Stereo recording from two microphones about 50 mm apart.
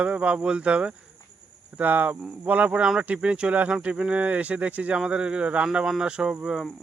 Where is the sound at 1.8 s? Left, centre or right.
Right.